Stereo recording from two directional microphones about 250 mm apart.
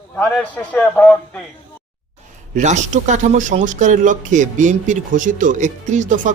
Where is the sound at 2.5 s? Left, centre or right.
Right.